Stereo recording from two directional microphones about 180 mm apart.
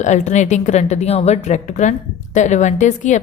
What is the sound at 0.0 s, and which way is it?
A woman's voice, 40° left (ahead or behind).